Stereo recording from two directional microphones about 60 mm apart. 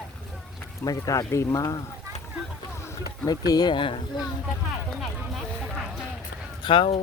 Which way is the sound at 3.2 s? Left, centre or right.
Left.